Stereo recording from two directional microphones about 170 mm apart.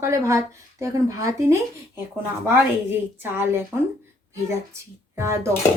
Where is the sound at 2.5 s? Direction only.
15° right (ahead or behind).